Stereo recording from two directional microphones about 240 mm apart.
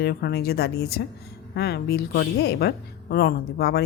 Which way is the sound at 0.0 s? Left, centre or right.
Left.